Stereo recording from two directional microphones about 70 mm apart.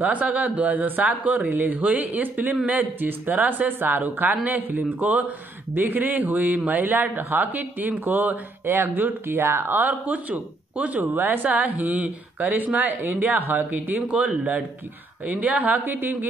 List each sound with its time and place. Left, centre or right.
0.0 s a man's voice: right